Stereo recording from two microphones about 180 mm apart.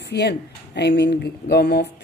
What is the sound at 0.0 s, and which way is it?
Speech, 65° left (ahead or behind).